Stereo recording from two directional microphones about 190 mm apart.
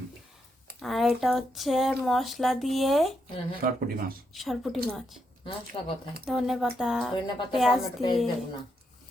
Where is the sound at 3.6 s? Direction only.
50° right (ahead or behind).